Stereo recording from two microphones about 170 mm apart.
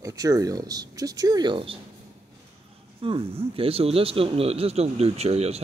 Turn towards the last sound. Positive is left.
turn(degrees=-40)  # may be behind; listen again after turning